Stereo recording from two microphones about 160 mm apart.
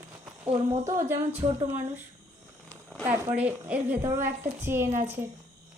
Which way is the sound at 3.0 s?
10° right (ahead or behind).